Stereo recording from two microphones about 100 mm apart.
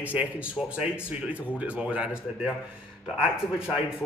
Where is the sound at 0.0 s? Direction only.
15° right (ahead or behind).